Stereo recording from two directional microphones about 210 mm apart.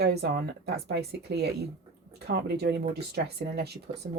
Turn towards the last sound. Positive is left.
turn(degrees=-50)  # may be behind; listen again after turning